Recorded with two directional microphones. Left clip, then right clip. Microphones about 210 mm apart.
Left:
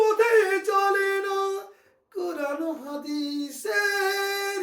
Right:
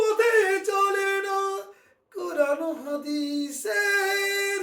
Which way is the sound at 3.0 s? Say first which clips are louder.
Right 1 dB; 10° right (ahead or behind).